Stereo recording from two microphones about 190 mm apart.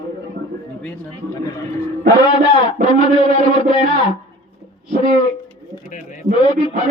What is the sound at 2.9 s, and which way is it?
A man's voice, 25° left (ahead or behind).